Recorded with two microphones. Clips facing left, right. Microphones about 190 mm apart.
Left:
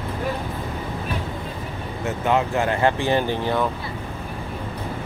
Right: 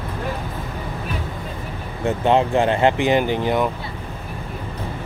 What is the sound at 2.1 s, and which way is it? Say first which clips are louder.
Speech: right 4 dB; 30° right (ahead or behind).